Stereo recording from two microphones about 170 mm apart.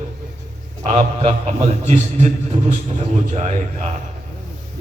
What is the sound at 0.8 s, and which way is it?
A man's voice, 40° right (ahead or behind).